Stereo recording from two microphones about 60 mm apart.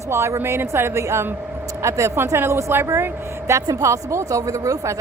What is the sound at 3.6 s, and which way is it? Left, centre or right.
Speech, right.